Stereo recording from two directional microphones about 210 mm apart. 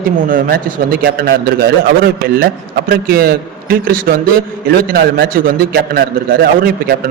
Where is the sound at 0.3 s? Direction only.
40° right (ahead or behind).